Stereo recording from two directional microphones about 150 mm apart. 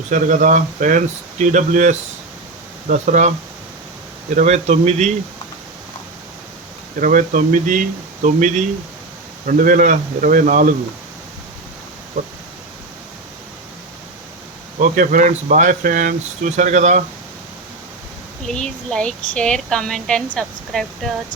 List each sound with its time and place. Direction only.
0.1 s speech: 60° right (ahead or behind)
4.4 s speech: 50° right (ahead or behind)
7.0 s speech: 65° right (ahead or behind)
14.8 s speech: 60° right (ahead or behind)
18.4 s a woman's voice: 5° left (ahead or behind)